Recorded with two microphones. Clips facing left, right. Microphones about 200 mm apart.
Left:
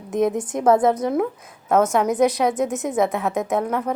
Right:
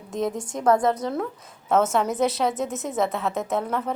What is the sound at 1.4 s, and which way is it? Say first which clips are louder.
Speech: left 2 dB; centre (ahead or behind).